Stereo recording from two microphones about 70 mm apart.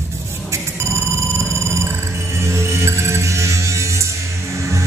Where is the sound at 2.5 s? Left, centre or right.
Right.